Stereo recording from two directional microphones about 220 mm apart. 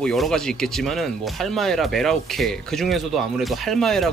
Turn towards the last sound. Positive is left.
turn(degrees=0)  # may be behind; listen again after turning